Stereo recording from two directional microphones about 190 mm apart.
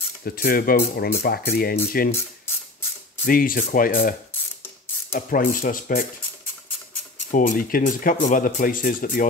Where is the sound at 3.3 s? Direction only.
50° left (ahead or behind).